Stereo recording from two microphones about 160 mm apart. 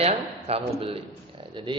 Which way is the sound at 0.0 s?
40° right (ahead or behind).